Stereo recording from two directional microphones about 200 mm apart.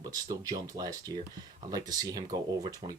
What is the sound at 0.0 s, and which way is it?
Speech, 20° right (ahead or behind).